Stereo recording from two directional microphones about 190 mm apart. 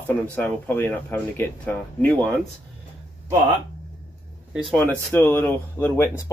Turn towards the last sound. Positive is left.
turn(degrees=15)  # may be behind; listen again after turning